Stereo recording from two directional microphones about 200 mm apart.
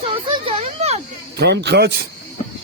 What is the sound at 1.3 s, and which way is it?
Speech, 60° right (ahead or behind).